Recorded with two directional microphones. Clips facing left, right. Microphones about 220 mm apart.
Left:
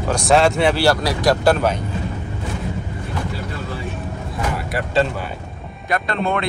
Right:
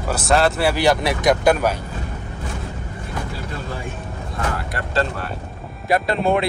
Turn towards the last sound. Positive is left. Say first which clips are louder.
# right 3 dB
turn(degrees=-5)  # may be behind; listen again after turning